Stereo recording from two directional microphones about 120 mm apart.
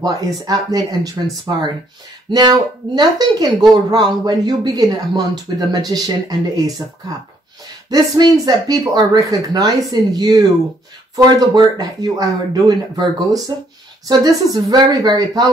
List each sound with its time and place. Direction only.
0.5 s speech: 30° right (ahead or behind)
2.3 s speech: 35° right (ahead or behind)
7.9 s speech: 35° right (ahead or behind)